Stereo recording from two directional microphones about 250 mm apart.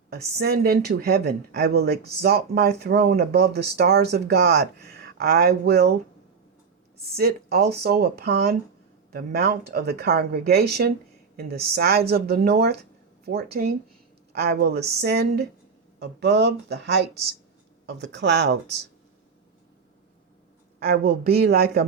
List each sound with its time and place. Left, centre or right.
0.1 s speech: right
7.0 s speech: right
20.7 s speech: right